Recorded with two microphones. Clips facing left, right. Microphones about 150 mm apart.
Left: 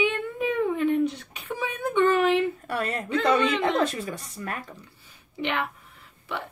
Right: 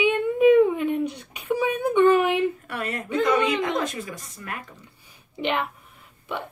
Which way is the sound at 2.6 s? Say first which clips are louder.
Left 2 dB; 35° left (ahead or behind).